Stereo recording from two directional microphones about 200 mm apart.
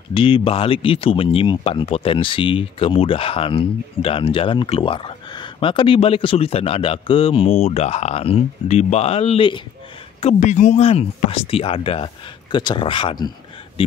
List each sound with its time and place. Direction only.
0.1 s speech: 25° left (ahead or behind)
10.2 s speech: 35° left (ahead or behind)
13.8 s a sound: 25° left (ahead or behind)